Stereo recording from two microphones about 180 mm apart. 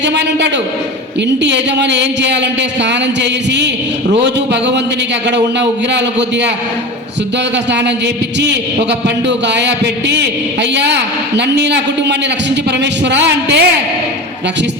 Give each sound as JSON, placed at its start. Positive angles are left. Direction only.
{"t": 0.0, "sound": "a man's voice", "side_deg": -75}
{"t": 7.5, "sound": "a man's voice", "side_deg": -75}